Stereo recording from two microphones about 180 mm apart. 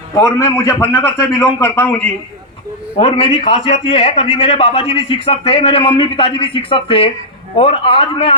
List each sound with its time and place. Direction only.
0.2 s a man's voice: 15° left (ahead or behind)
3.0 s a man's voice: 35° left (ahead or behind)